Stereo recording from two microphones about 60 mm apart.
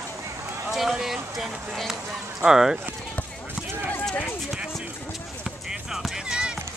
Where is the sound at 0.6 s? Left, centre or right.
Centre.